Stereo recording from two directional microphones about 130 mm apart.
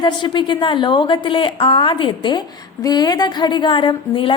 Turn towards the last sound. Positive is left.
turn(degrees=40)  # may be behind; listen again after turning